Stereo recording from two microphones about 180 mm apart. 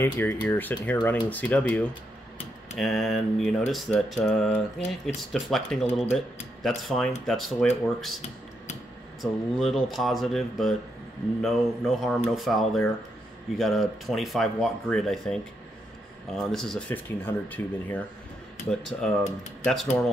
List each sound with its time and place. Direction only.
0.0 s speech: 10° left (ahead or behind)
9.2 s speech: centre (ahead or behind)